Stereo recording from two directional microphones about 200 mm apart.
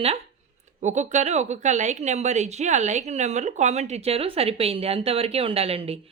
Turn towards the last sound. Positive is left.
turn(degrees=-30)  # may be behind; listen again after turning